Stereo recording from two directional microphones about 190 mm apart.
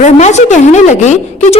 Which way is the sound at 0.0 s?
35° left (ahead or behind).